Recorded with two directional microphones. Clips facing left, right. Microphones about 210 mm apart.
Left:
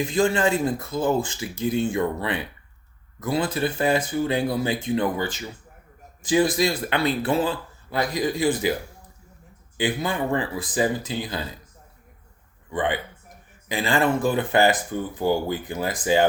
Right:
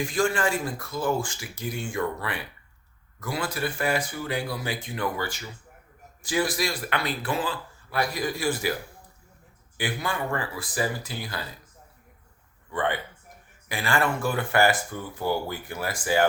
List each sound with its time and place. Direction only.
0.0 s speech: 20° left (ahead or behind)
9.7 s speech: 20° left (ahead or behind)
12.7 s speech: 15° left (ahead or behind)